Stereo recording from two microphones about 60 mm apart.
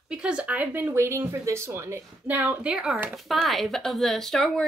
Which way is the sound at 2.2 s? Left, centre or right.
Right.